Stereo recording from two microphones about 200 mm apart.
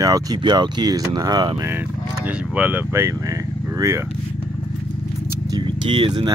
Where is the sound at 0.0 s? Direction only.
20° right (ahead or behind).